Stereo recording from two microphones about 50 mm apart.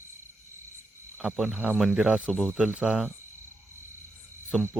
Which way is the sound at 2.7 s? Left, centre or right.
Right.